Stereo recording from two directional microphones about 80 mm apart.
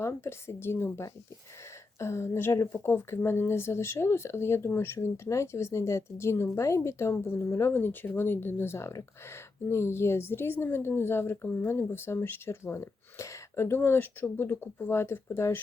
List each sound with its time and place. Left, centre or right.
0.0 s speech: left